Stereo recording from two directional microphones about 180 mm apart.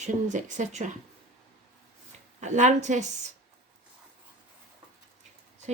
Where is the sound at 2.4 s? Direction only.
40° right (ahead or behind).